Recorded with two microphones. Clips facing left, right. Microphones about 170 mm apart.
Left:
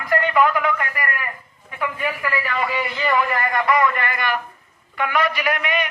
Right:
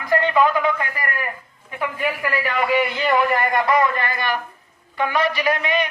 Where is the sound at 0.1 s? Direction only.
25° right (ahead or behind).